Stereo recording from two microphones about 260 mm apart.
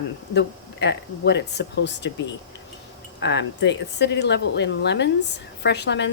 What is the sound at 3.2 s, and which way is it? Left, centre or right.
Speech, left.